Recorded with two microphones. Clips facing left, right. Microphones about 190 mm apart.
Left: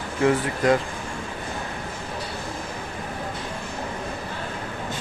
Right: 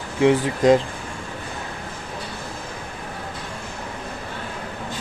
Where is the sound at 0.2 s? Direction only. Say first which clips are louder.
Right 4 dB; 20° right (ahead or behind).